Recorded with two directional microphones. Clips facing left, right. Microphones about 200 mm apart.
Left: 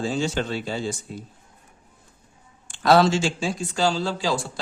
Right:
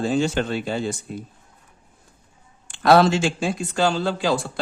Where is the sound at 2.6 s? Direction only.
60° right (ahead or behind).